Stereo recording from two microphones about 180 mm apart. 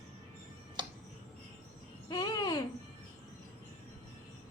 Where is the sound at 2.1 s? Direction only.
25° left (ahead or behind).